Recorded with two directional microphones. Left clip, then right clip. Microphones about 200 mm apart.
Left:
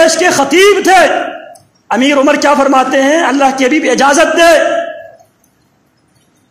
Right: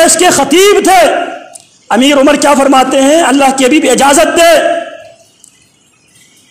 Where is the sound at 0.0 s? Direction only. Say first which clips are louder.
Right 1 dB; 30° right (ahead or behind).